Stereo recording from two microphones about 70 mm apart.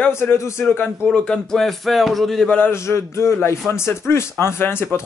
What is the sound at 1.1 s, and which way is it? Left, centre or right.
Speech, centre.